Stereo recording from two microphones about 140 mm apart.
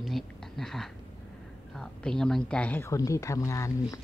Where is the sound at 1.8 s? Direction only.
5° left (ahead or behind).